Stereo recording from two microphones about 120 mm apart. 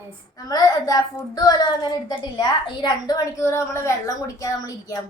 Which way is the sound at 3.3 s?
25° left (ahead or behind).